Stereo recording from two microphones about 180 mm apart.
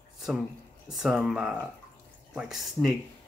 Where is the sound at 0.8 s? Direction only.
5° right (ahead or behind).